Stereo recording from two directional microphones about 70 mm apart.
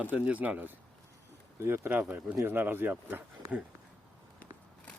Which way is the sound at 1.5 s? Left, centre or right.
Right.